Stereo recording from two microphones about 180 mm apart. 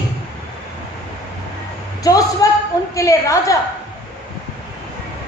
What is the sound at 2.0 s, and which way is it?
A woman's voice, 20° left (ahead or behind).